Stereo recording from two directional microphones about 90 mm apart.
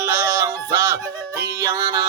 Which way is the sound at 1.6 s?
35° right (ahead or behind).